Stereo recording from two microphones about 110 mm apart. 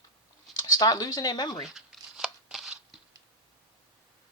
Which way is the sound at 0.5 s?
35° left (ahead or behind).